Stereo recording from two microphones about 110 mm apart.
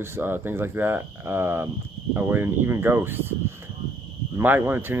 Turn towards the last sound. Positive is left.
turn(degrees=-20)  # may be behind; listen again after turning